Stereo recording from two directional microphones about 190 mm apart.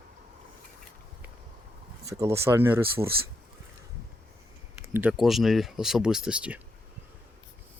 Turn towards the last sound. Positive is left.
turn(degrees=-5)  # may be behind; listen again after turning